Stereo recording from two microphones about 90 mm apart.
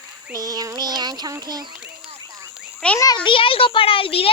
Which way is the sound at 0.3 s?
45° right (ahead or behind).